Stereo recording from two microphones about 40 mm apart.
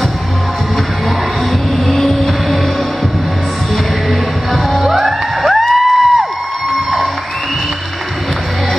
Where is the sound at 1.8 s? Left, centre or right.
Centre.